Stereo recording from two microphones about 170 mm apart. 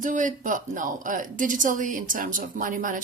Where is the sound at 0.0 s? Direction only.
50° right (ahead or behind).